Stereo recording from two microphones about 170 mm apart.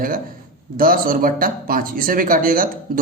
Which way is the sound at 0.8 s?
55° right (ahead or behind).